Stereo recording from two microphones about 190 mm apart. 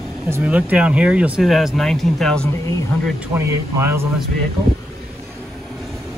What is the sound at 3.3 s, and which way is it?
Speech, 15° right (ahead or behind).